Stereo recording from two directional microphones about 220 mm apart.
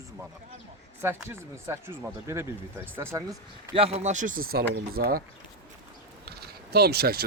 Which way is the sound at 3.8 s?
30° right (ahead or behind).